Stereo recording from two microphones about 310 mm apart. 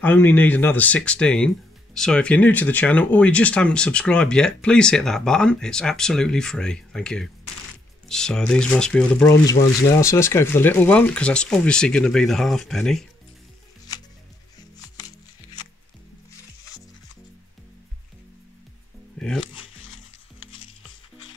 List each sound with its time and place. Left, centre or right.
0.0 s speech: centre
19.1 s music: centre
19.8 s music: left